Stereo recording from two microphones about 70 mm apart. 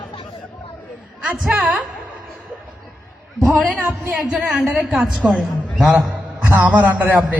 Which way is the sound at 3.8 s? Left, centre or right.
Right.